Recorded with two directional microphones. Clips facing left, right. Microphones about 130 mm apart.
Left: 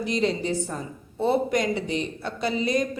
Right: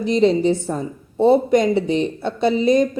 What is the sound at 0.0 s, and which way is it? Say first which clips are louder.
Speech: right 9 dB; 25° right (ahead or behind).